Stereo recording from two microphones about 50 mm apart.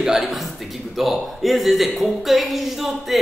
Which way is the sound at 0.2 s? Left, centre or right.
Centre.